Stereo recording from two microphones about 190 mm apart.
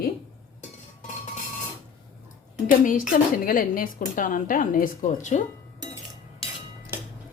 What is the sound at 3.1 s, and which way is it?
A woman's voice, 45° left (ahead or behind).